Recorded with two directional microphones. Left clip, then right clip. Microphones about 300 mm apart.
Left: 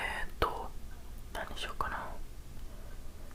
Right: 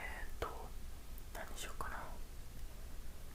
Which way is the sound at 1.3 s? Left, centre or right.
Centre.